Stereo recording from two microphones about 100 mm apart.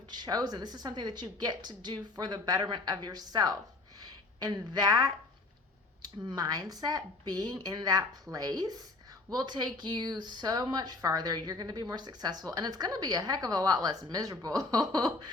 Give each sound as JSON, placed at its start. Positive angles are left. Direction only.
{"t": 0.1, "sound": "a woman's voice", "side_deg": -45}